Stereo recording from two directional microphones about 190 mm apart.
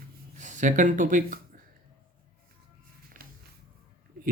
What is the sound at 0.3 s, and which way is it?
Speech, 40° right (ahead or behind).